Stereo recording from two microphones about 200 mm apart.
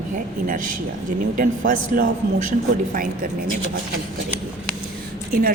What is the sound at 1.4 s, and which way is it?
A man's voice, 45° right (ahead or behind).